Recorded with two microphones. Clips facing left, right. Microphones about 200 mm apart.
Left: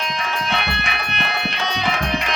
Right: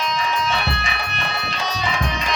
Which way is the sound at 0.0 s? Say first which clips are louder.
Right 3 dB; 60° left (ahead or behind).